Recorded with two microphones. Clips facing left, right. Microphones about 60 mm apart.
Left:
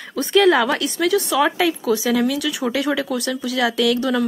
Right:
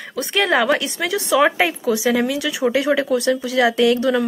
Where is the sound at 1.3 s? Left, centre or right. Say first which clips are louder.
Right 6 dB; right.